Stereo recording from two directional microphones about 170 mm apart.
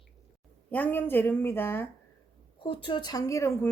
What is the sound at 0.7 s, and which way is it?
A woman's voice, 10° left (ahead or behind).